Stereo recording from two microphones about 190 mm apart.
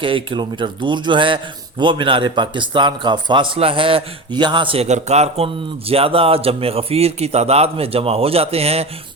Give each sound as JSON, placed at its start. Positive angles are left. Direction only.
{"t": 0.0, "sound": "a man's voice", "side_deg": -25}